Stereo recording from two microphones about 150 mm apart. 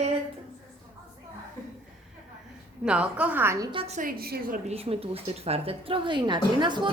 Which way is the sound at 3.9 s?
80° right.